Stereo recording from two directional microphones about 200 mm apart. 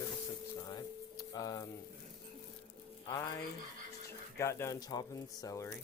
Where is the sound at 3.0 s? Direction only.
15° left (ahead or behind).